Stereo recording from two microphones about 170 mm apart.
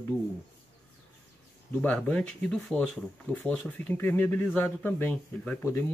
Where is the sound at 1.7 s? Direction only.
10° left (ahead or behind).